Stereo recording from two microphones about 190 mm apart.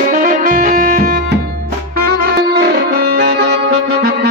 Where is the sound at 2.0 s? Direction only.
55° right (ahead or behind).